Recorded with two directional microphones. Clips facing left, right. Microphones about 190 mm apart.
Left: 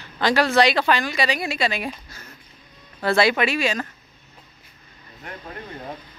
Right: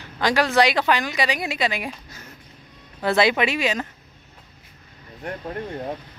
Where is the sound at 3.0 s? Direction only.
20° right (ahead or behind).